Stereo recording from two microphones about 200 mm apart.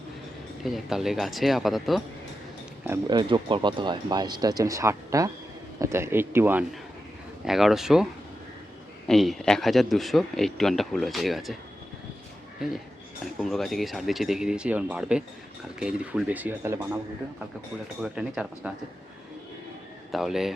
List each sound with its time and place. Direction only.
0.6 s a man's voice: centre (ahead or behind)
2.8 s a man's voice: 15° right (ahead or behind)
9.0 s a man's voice: centre (ahead or behind)
13.4 s a man's voice: centre (ahead or behind)
18.0 s a man's voice: 5° right (ahead or behind)
20.1 s a man's voice: centre (ahead or behind)